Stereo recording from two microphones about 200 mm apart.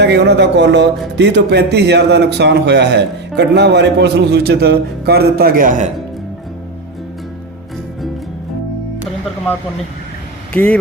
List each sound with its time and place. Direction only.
0.0 s a man's voice: 55° right (ahead or behind); by 5.9 s 40° right (ahead or behind)
10.5 s speech: 5° left (ahead or behind)